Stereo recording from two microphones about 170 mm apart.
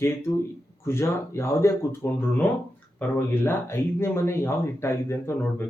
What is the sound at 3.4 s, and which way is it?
Speech, 15° left (ahead or behind).